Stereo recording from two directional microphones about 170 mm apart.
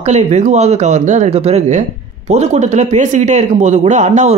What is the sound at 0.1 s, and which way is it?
Speech, 45° right (ahead or behind).